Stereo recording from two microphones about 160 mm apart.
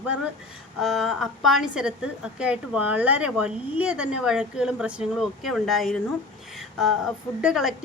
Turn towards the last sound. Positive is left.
turn(degrees=-5)  # may be behind; listen again after turning